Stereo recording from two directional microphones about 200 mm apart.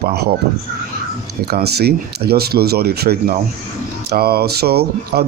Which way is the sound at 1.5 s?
50° right (ahead or behind).